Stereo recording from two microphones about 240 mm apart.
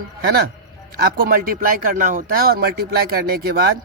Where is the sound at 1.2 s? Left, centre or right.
Right.